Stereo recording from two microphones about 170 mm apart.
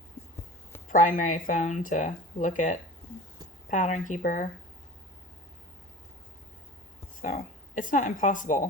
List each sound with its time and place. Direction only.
0.9 s speech: 50° left (ahead or behind)
7.8 s speech: 50° left (ahead or behind)